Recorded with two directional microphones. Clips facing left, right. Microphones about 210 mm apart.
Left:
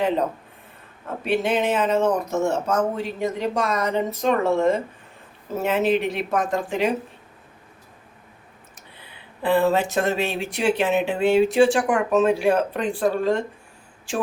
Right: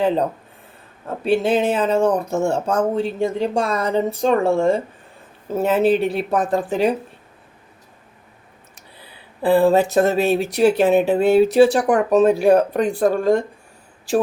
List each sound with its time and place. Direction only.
1.2 s speech: 30° right (ahead or behind)
9.0 s speech: 35° right (ahead or behind)